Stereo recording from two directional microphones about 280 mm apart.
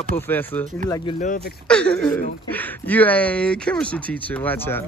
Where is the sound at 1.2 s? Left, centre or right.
Left.